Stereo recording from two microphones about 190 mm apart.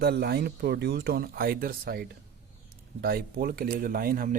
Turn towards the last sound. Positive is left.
turn(degrees=-50)  # may be behind; listen again after turning